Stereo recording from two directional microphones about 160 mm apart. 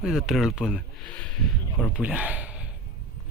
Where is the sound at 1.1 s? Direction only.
5° left (ahead or behind).